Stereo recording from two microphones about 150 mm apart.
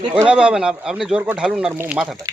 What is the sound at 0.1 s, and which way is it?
Speech, 10° right (ahead or behind).